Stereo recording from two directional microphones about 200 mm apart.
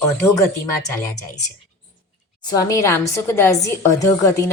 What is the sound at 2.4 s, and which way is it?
Speech, 15° left (ahead or behind).